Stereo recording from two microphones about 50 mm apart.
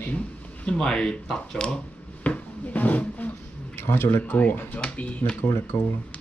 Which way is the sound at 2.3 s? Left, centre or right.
Left.